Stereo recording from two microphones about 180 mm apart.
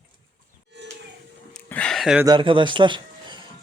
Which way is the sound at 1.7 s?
5° left (ahead or behind).